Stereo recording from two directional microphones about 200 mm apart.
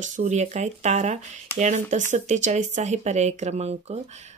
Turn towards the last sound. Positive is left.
turn(degrees=-30)  # may be behind; listen again after turning